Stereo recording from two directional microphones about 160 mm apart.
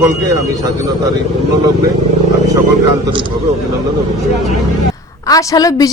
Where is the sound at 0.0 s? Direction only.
20° right (ahead or behind).